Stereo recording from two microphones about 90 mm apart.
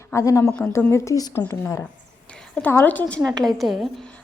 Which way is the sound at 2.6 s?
20° left (ahead or behind).